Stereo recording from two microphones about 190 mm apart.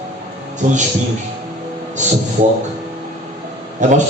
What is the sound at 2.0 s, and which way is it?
Speech, 40° right (ahead or behind).